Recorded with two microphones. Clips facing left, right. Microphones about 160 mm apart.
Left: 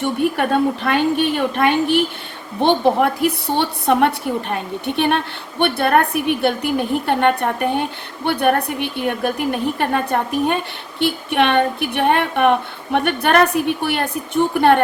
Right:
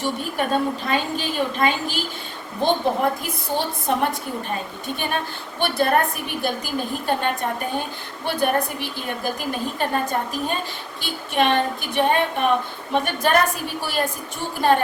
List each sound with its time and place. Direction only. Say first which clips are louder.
0.0 s a woman's voice: left 6 dB; 65° left (ahead or behind)